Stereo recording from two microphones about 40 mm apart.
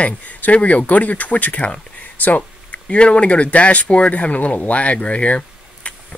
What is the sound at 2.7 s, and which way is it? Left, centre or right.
Speech, left.